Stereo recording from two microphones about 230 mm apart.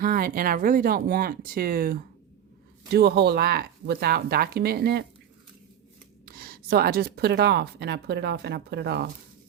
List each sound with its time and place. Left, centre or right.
0.0 s speech: right
6.2 s speech: right